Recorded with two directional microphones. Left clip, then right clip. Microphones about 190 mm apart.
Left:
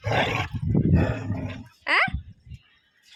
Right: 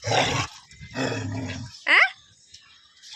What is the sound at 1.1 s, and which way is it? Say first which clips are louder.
Roar: right 2 dB; 10° left (ahead or behind).